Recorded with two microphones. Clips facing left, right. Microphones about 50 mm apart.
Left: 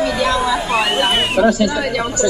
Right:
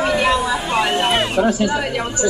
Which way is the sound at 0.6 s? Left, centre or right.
Left.